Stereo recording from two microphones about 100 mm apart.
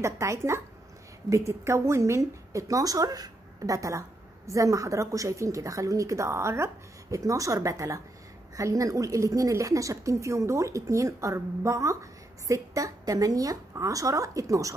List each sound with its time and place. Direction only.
0.0 s a woman's voice: 30° right (ahead or behind)